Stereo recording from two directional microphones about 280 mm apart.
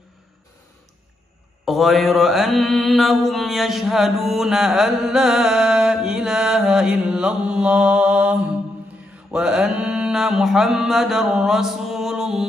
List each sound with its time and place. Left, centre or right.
1.6 s mantra: centre